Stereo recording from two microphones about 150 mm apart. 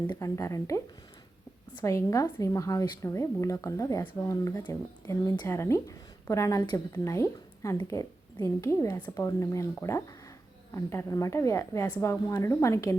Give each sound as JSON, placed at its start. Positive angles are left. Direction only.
{"t": 0.1, "sound": "a woman's voice", "side_deg": 20}